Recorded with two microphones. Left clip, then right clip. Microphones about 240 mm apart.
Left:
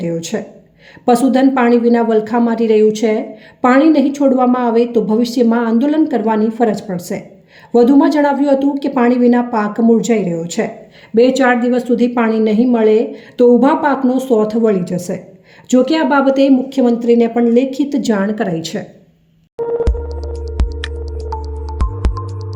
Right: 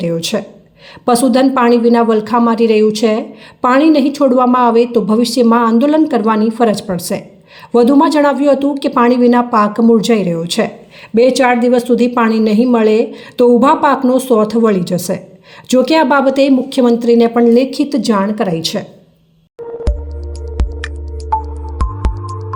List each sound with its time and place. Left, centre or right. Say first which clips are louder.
0.0 s a woman's voice: right 4 dB; centre
19.8 s music: left 5 dB; centre